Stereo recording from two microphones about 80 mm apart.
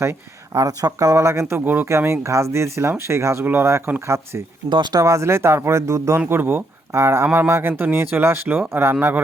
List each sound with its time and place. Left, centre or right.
0.5 s speech: right
4.7 s speech: right
5.0 s speech: right
6.2 s speech: right